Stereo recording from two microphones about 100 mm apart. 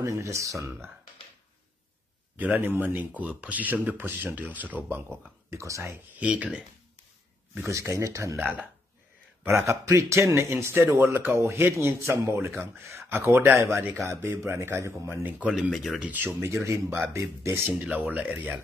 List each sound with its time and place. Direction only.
0.0 s speech: 30° right (ahead or behind)
2.3 s speech: 15° right (ahead or behind)
5.5 s speech: 30° right (ahead or behind)
6.1 s speech: 15° right (ahead or behind)
7.5 s speech: 30° right (ahead or behind)
15.2 s speech: 15° right (ahead or behind)
15.5 s speech: centre (ahead or behind)
16.0 s speech: 15° right (ahead or behind)
16.4 s speech: 30° right (ahead or behind)
17.6 s speech: 15° right (ahead or behind)